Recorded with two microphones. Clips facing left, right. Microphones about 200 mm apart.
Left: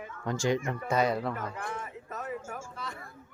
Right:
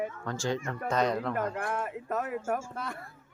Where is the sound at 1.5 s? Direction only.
55° right (ahead or behind).